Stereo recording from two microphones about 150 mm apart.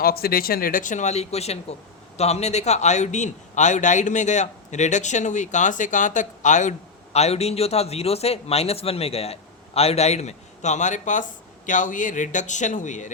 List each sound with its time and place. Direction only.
0.0 s a man's voice: 80° left; by 13.1 s 55° left (ahead or behind)